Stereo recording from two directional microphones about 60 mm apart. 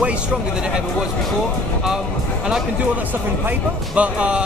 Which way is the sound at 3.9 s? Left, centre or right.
Centre.